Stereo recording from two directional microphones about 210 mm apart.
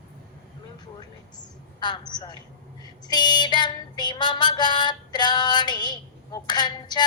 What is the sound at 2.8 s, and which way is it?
Female singing, 20° left (ahead or behind).